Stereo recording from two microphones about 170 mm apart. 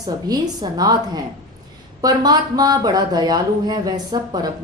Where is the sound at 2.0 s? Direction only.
25° right (ahead or behind).